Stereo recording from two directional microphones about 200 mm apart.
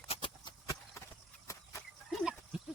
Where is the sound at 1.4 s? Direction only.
15° left (ahead or behind).